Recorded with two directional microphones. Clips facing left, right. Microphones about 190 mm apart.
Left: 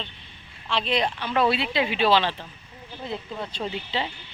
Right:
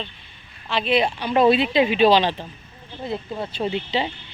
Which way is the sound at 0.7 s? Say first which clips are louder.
Right 4 dB; 5° right (ahead or behind).